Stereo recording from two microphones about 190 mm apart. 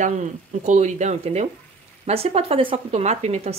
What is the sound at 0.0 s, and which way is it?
Speech, 40° right (ahead or behind).